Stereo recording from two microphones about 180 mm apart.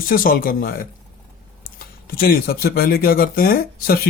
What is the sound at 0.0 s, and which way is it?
Speech, 55° left (ahead or behind).